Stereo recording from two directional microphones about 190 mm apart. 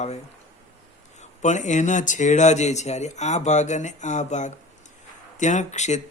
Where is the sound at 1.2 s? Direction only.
40° left (ahead or behind).